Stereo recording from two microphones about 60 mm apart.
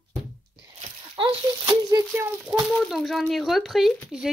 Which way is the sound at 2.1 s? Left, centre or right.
Right.